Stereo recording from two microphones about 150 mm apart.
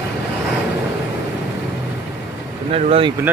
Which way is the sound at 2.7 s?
40° right (ahead or behind).